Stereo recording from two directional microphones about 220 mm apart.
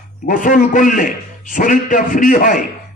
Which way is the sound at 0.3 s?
40° left (ahead or behind).